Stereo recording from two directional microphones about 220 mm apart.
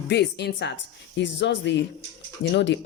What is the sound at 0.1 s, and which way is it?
Speech, 50° left (ahead or behind).